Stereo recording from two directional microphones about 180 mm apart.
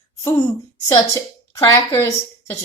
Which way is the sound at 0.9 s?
20° left (ahead or behind).